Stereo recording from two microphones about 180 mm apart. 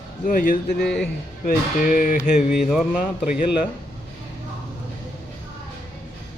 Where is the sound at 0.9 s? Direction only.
5° left (ahead or behind).